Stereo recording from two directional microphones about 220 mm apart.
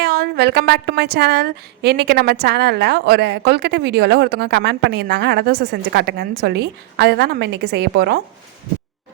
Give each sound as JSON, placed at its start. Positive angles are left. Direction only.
{"t": 0.0, "sound": "a woman's voice", "side_deg": -50}